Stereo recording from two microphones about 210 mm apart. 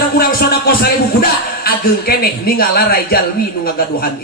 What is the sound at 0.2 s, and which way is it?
Music, 45° left (ahead or behind).